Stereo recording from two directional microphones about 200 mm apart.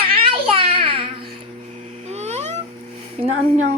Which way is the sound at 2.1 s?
35° right (ahead or behind).